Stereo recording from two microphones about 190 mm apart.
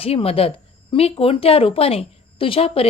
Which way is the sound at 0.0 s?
30° left (ahead or behind).